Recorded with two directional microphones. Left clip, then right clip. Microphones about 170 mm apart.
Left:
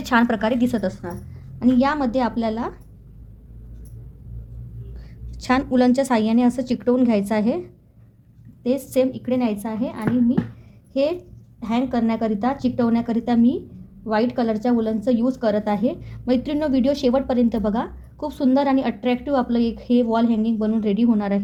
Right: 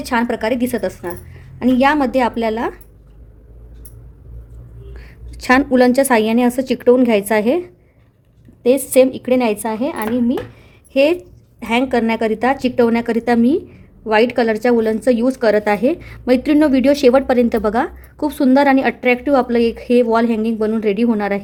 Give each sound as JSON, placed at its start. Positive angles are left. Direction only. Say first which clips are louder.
{"t": 0.0, "sound": "a woman's voice", "louder": "right 1 dB", "side_deg": -15}
{"t": 1.5, "sound": "a woman's voice", "louder": "right 6 dB", "side_deg": -55}
{"t": 4.9, "sound": "a woman's voice", "louder": "right 7 dB", "side_deg": -50}
{"t": 8.6, "sound": "a woman's voice", "louder": "right 9 dB", "side_deg": -60}